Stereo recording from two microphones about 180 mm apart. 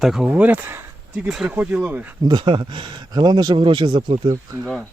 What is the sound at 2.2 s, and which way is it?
Speech, 25° right (ahead or behind).